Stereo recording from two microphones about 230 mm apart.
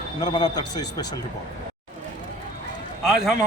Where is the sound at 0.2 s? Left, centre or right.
Centre.